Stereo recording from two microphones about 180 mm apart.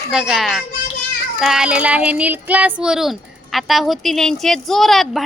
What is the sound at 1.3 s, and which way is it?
Child singing, 5° right (ahead or behind).